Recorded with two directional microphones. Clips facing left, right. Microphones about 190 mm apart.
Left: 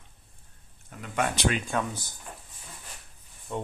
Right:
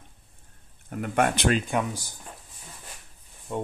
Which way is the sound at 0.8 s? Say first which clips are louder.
Right 5 dB; 55° right (ahead or behind).